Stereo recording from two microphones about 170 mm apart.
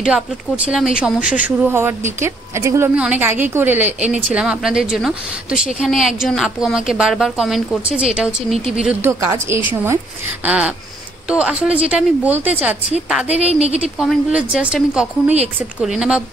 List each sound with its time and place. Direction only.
0.7 s a woman's voice: 5° right (ahead or behind)
8.8 s speech: 15° right (ahead or behind)
13.5 s speech: 35° right (ahead or behind)
13.9 s a woman's voice: 5° right (ahead or behind)